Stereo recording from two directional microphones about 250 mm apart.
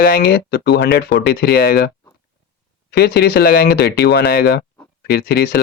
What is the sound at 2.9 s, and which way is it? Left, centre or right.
Speech, left.